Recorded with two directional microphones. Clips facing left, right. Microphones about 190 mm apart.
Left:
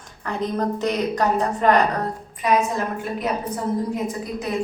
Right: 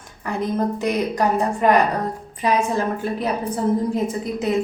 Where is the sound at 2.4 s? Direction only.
30° right (ahead or behind).